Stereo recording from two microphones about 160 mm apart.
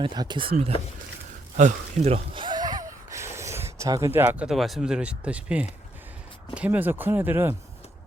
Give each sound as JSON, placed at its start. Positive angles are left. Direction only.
{"t": 0.0, "sound": "speech", "side_deg": -30}
{"t": 1.5, "sound": "a sound", "side_deg": -45}
{"t": 4.4, "sound": "speech", "side_deg": 0}